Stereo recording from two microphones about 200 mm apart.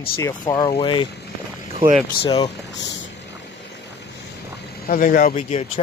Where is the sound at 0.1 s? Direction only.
15° left (ahead or behind).